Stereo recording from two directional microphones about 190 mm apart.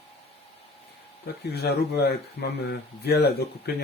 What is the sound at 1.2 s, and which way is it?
Speech, 60° left (ahead or behind).